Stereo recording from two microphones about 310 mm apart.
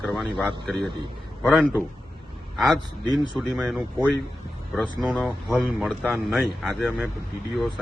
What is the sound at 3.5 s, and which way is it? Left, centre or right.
Speech, centre.